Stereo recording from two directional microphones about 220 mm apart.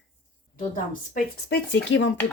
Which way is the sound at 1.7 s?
55° left (ahead or behind).